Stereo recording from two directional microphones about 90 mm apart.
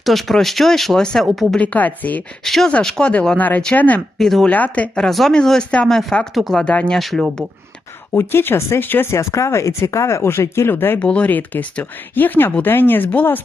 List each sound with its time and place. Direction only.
0.0 s speech: centre (ahead or behind)
1.5 s speech: 15° left (ahead or behind)
2.4 s speech: 5° left (ahead or behind)
4.2 s speech: 5° left (ahead or behind)
4.4 s speech: 15° left (ahead or behind)
8.1 s speech: 25° left (ahead or behind)